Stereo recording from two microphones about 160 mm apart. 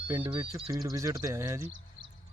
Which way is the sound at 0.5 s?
20° right (ahead or behind).